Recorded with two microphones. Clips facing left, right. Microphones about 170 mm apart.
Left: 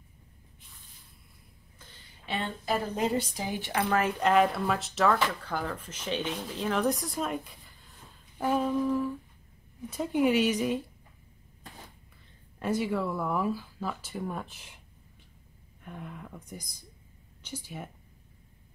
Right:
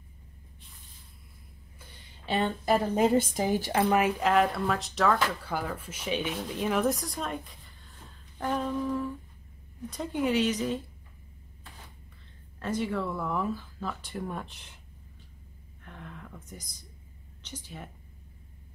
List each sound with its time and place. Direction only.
2.6 s a woman's voice: 50° right (ahead or behind)
3.7 s speech: 20° right (ahead or behind)
4.2 s speech: centre (ahead or behind)
8.4 s a sound: 5° left (ahead or behind)
9.8 s speech: 5° left (ahead or behind)
12.5 s speech: 10° left (ahead or behind)
15.8 s speech: 10° left (ahead or behind)